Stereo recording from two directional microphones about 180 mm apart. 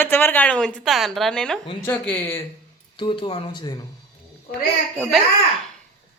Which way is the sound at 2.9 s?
25° left (ahead or behind).